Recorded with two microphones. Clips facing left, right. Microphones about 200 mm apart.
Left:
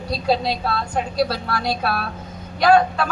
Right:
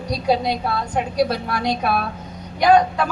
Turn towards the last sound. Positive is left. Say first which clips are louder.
# right 1 dB
turn(degrees=-15)  # may be behind; listen again after turning